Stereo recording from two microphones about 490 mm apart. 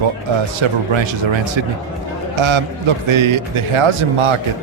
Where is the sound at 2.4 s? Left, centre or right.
Right.